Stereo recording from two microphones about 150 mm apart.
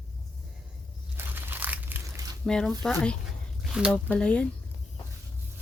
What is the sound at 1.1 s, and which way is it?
Crunch, 15° right (ahead or behind).